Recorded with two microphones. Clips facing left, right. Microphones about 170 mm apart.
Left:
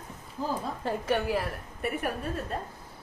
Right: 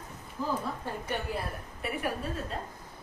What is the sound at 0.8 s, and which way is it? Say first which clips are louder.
Speech: left 6 dB; 90° left.